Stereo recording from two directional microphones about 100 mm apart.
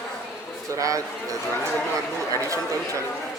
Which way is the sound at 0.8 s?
35° right (ahead or behind).